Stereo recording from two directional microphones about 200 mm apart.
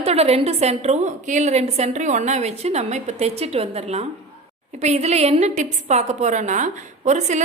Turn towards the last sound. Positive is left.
turn(degrees=-35)  # may be behind; listen again after turning